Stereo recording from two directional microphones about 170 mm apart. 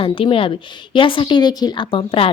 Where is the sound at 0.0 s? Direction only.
30° left (ahead or behind).